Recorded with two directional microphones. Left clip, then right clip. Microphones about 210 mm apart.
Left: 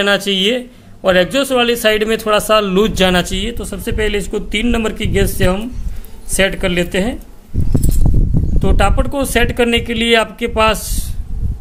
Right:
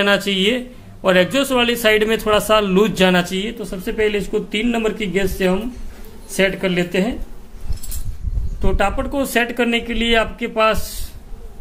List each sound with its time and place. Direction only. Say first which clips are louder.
0.0 s a man's voice: left 2 dB; 15° left (ahead or behind)
8.5 s speech: left 3 dB; 30° left (ahead or behind)